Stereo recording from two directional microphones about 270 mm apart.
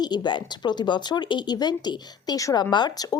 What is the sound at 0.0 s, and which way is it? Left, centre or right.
Speech, centre.